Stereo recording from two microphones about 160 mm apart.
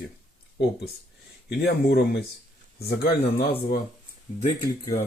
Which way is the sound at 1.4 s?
90° left.